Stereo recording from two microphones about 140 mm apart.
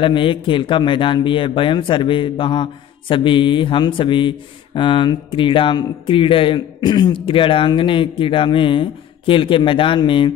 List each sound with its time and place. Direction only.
0.0 s speech: 40° left (ahead or behind)